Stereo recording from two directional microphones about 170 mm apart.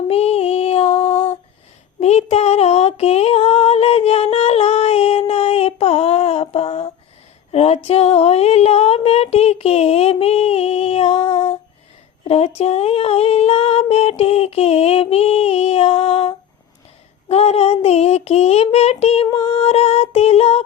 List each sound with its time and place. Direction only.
0.1 s music: 35° left (ahead or behind)
2.0 s female singing: 40° left (ahead or behind)
7.5 s a sound: 35° left (ahead or behind)
12.2 s female singing: 35° left (ahead or behind)